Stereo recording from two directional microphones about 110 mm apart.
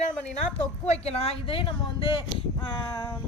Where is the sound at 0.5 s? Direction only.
70° left (ahead or behind).